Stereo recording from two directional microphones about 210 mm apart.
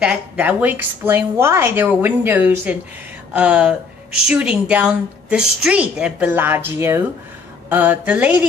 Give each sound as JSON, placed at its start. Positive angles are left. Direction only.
{"t": 0.0, "sound": "a woman's voice", "side_deg": -5}